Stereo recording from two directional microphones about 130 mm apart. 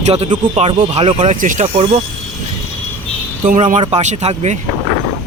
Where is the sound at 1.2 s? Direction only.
80° right.